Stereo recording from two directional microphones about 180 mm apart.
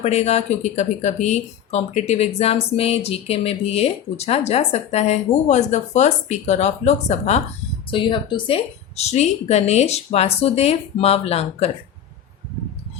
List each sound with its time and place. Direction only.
0.0 s speech: 40° left (ahead or behind)
7.9 s speech: 25° left (ahead or behind)